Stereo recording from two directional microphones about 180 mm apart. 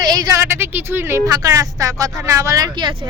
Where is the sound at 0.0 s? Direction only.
20° right (ahead or behind).